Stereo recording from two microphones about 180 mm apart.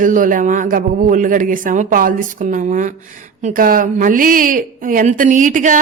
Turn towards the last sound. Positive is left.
turn(degrees=-45)  # may be behind; listen again after turning